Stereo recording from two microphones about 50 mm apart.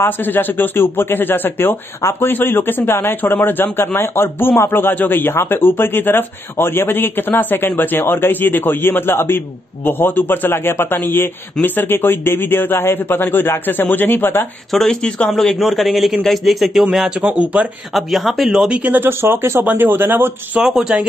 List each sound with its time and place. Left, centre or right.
0.0 s speech: left
2.0 s speech: left
14.7 s speech: centre
15.0 s speech: centre
15.3 s a man's voice: centre
17.2 s speech: right
17.9 s a man's voice: centre
18.7 s speech: right
19.0 s a man's voice: right
19.6 s a man's voice: right
20.6 s speech: centre